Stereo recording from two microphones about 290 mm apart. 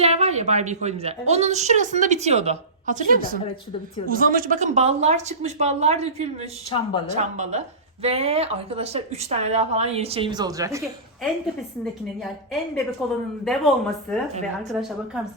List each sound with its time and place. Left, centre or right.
0.0 s a woman's voice: right
6.7 s speech: centre
7.1 s a woman's voice: right
13.4 s speech: centre